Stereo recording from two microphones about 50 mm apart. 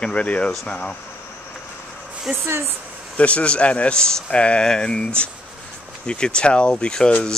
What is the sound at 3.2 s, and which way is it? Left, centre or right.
Speech, left.